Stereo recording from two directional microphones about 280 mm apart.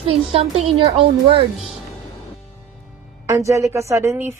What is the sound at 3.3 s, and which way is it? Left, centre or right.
Music, centre.